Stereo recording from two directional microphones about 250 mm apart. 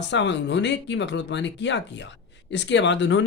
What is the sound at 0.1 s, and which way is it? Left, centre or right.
Speech, left.